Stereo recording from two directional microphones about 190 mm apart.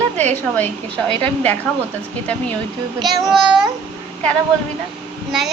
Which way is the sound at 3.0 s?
Centre (ahead or behind).